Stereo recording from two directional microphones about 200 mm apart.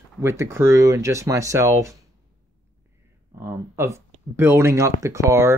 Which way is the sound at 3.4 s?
15° right (ahead or behind).